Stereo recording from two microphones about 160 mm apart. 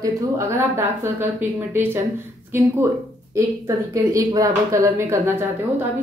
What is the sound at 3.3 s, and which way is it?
A woman's voice, 20° right (ahead or behind).